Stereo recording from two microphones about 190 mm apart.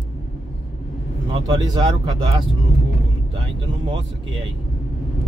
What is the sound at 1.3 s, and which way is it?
Speech, 20° right (ahead or behind).